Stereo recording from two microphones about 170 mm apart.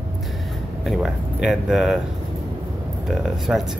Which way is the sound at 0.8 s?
Centre (ahead or behind).